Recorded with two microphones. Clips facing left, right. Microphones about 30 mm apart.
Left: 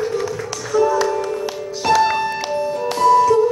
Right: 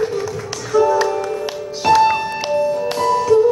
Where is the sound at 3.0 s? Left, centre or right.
Centre.